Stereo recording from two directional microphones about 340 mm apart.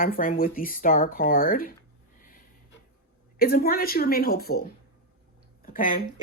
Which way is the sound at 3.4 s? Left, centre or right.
Left.